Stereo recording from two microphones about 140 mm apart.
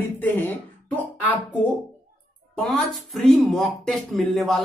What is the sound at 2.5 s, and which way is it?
Speech, 5° left (ahead or behind).